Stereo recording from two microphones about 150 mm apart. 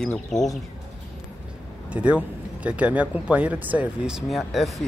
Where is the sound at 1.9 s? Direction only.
10° right (ahead or behind).